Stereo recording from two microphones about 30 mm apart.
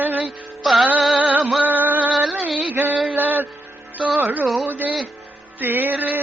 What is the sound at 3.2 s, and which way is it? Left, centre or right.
Music, right.